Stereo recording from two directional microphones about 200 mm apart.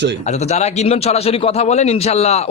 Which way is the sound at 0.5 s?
35° left (ahead or behind).